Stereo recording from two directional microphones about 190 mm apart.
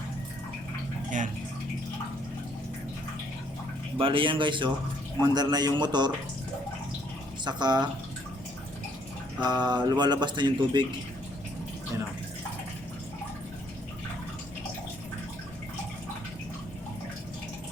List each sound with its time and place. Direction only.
3.9 s speech: 30° right (ahead or behind)
7.4 s speech: 20° right (ahead or behind)
9.4 s speech: 20° right (ahead or behind)